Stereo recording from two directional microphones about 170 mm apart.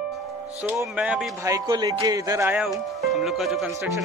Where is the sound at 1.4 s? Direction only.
20° right (ahead or behind).